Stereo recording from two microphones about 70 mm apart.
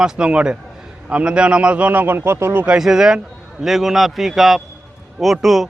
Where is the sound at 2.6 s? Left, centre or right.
Centre.